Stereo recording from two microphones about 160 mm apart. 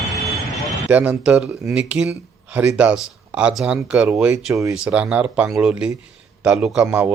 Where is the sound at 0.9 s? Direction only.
10° right (ahead or behind).